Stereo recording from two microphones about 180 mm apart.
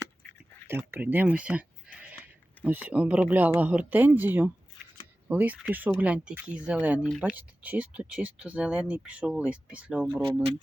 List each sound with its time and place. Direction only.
0.7 s speech: 10° right (ahead or behind)